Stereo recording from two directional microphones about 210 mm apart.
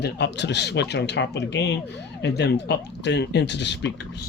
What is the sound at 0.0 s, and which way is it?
Speech, 55° left (ahead or behind).